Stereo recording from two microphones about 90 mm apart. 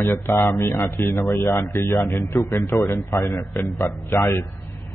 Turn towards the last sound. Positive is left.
turn(degrees=35)  # may be behind; listen again after turning